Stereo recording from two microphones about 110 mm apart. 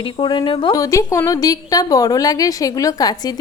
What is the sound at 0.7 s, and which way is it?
A woman's voice, 30° left (ahead or behind).